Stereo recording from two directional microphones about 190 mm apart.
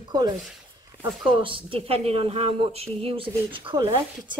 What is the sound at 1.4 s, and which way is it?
A woman's voice, 25° right (ahead or behind).